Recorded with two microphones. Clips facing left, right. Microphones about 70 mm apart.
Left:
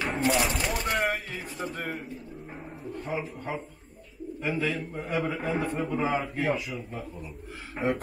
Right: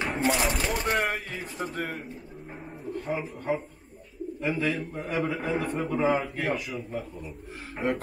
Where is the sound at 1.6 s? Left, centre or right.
Centre.